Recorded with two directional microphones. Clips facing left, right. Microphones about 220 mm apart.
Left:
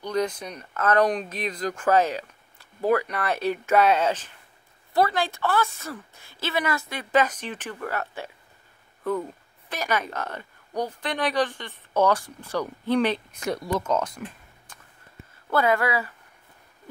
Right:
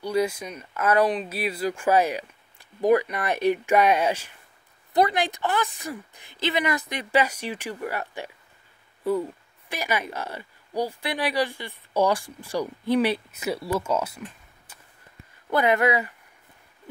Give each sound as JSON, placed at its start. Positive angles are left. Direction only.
{"t": 0.0, "sound": "speech", "side_deg": -10}
{"t": 9.7, "sound": "speech", "side_deg": -10}
{"t": 14.7, "sound": "a sound", "side_deg": -10}
{"t": 15.5, "sound": "speech", "side_deg": -20}